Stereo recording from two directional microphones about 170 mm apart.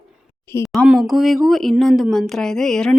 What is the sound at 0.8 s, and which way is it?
Speech, 5° right (ahead or behind).